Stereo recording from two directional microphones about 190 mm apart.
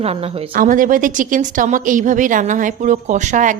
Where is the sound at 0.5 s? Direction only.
45° right (ahead or behind).